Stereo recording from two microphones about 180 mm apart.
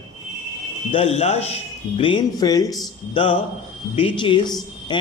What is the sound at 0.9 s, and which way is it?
Speech, 35° left (ahead or behind).